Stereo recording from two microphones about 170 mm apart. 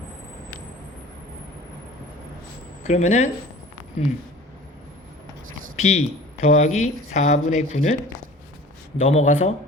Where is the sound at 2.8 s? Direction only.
45° left (ahead or behind).